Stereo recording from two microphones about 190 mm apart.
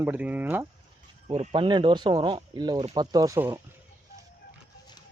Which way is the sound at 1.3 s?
30° right (ahead or behind).